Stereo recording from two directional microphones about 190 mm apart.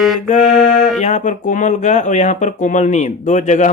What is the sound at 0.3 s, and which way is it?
Speech, 40° left (ahead or behind).